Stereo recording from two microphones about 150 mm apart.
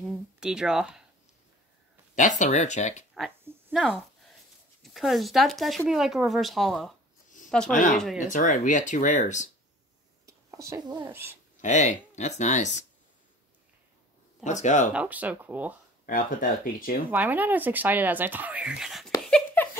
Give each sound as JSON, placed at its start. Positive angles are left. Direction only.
{"t": 0.1, "sound": "speech", "side_deg": -5}
{"t": 2.1, "sound": "speech", "side_deg": 55}
{"t": 3.7, "sound": "speech", "side_deg": 0}
{"t": 7.7, "sound": "speech", "side_deg": 55}
{"t": 10.2, "sound": "a sound", "side_deg": -20}
{"t": 11.1, "sound": "speech", "side_deg": -15}
{"t": 11.6, "sound": "speech", "side_deg": 55}
{"t": 14.4, "sound": "speech", "side_deg": 50}
{"t": 14.9, "sound": "speech", "side_deg": -10}
{"t": 16.1, "sound": "speech", "side_deg": 65}
{"t": 17.1, "sound": "speech", "side_deg": -10}
{"t": 19.2, "sound": "a sound", "side_deg": 10}